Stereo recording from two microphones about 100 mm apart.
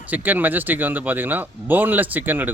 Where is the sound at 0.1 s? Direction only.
20° right (ahead or behind).